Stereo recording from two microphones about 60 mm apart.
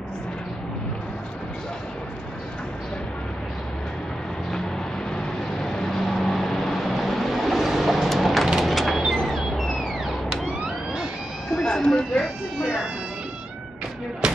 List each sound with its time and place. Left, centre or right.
5.1 s vehicle: centre
11.5 s vehicle: centre
12.6 s cat: centre
14.2 s a sound: centre